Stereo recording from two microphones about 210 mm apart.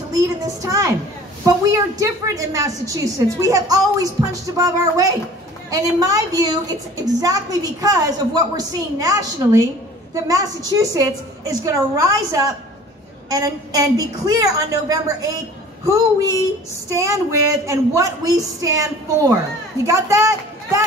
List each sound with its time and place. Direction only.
0.1 s a woman's voice: 15° right (ahead or behind)